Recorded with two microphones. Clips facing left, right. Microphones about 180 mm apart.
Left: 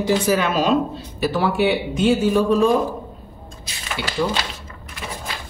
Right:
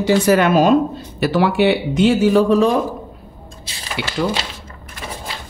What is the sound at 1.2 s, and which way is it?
A man's voice, 80° right.